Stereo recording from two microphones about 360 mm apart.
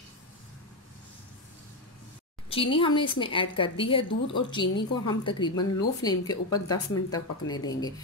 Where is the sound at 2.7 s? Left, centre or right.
Centre.